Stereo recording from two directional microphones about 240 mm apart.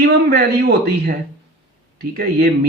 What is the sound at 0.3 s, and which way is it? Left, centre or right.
Speech, right.